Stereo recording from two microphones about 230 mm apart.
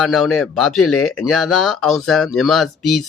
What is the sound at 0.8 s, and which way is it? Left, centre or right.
Speech, left.